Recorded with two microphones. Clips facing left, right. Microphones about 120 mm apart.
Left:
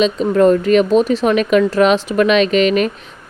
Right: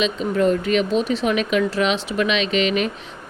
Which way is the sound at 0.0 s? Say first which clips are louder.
Left 7 dB; 40° left (ahead or behind).